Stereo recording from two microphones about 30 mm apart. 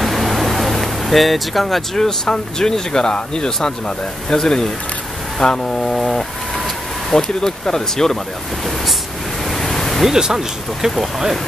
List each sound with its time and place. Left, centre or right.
0.0 s vehicle: centre
2.0 s speech: left
5.8 s speech: centre
9.5 s waves: centre
10.1 s speech: centre